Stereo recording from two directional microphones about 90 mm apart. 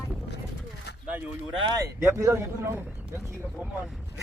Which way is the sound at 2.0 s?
30° right (ahead or behind).